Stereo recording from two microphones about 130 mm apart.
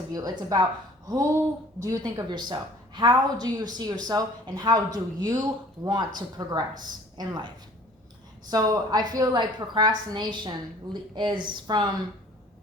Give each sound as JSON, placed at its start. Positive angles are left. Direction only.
{"t": 0.1, "sound": "a woman's voice", "side_deg": -30}